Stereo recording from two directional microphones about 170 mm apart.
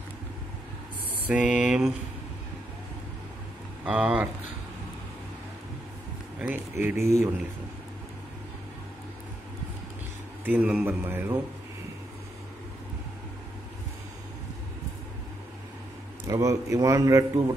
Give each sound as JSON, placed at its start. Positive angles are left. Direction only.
{"t": 1.2, "sound": "mantra", "side_deg": -10}
{"t": 3.8, "sound": "a man's voice", "side_deg": -10}
{"t": 6.7, "sound": "a man's voice", "side_deg": -15}
{"t": 10.4, "sound": "a man's voice", "side_deg": -10}
{"t": 16.3, "sound": "a man's voice", "side_deg": -20}